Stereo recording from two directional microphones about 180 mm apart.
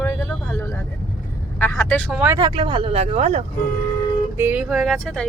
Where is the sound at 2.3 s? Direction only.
30° right (ahead or behind).